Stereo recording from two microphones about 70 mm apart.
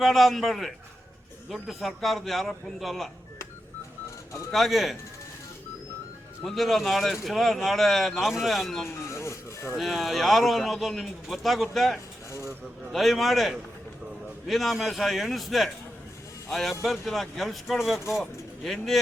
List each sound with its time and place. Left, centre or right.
0.0 s a man's voice: centre
4.5 s a man's voice: centre
6.4 s a man's voice: centre
9.3 s a sound: left
9.7 s a man's voice: centre